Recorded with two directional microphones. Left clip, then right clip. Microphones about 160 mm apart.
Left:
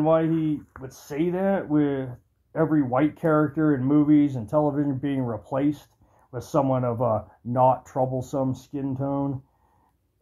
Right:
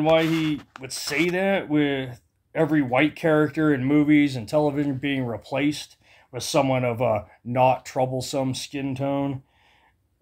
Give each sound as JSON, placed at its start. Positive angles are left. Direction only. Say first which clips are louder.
{"t": 0.0, "sound": "speech", "louder": "right 2 dB", "side_deg": -30}